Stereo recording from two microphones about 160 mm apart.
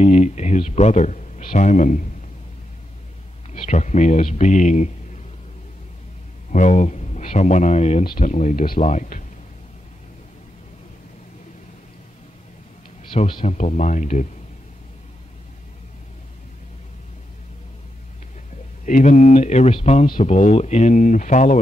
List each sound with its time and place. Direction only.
0.0 s a man's voice: 45° left (ahead or behind)
3.5 s speech: 45° left (ahead or behind)
6.5 s speech: 50° left (ahead or behind)
8.0 s speech: 65° left (ahead or behind)
8.3 s speech: 50° left (ahead or behind)
13.1 s speech: 35° left (ahead or behind)
13.4 s speech: 45° left (ahead or behind)
18.9 s speech: 50° left (ahead or behind)